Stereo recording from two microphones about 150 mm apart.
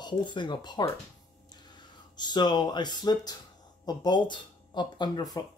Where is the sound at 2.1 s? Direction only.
30° left (ahead or behind).